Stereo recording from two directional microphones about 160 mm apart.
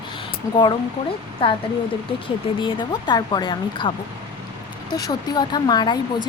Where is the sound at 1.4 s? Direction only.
30° left (ahead or behind).